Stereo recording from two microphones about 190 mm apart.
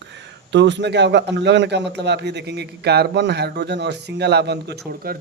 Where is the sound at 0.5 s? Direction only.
70° right (ahead or behind).